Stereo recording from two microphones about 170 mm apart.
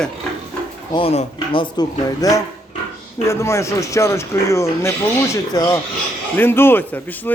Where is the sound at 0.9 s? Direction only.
35° left (ahead or behind).